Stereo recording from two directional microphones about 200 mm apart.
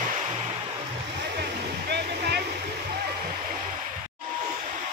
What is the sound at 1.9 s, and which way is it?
Waterfall, 55° right (ahead or behind).